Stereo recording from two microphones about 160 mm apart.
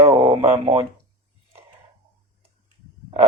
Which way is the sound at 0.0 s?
35° right (ahead or behind).